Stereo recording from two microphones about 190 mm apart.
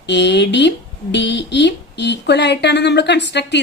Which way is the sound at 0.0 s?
65° left (ahead or behind).